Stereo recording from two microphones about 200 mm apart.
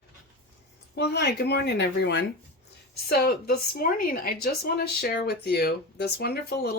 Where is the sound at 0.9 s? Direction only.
55° left (ahead or behind).